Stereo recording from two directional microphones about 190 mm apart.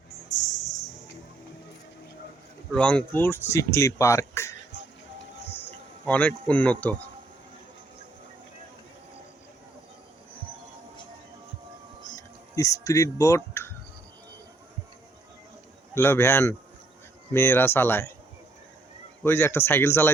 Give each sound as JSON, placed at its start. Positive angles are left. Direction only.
{"t": 2.7, "sound": "speech", "side_deg": 5}
{"t": 6.1, "sound": "speech", "side_deg": 5}
{"t": 12.5, "sound": "speech", "side_deg": 15}
{"t": 16.0, "sound": "speech", "side_deg": 10}
{"t": 19.2, "sound": "speech", "side_deg": 10}